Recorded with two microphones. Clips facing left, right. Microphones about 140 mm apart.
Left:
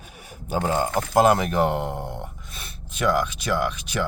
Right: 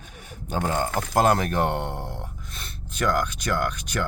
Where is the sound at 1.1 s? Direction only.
5° left (ahead or behind).